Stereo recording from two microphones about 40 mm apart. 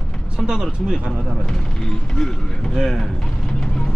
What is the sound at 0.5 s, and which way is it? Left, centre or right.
Speech, centre.